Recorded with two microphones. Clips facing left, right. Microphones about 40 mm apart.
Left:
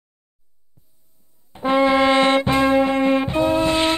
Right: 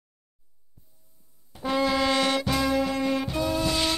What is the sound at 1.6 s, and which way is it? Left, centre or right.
Brass instrument, left.